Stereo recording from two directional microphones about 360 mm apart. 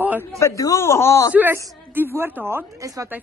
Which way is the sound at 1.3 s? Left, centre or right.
Centre.